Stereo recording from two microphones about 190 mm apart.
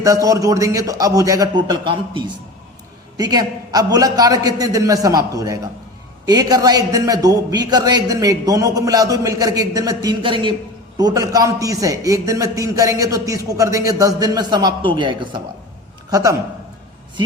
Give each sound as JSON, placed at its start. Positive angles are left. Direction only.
{"t": 0.0, "sound": "a man's voice", "side_deg": -15}